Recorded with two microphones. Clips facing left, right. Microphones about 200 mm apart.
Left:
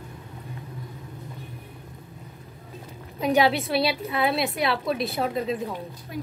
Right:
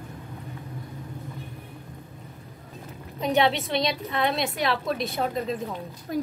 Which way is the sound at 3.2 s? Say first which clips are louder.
Left 2 dB; 5° left (ahead or behind).